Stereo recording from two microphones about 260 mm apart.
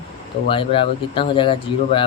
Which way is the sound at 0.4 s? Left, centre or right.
Centre.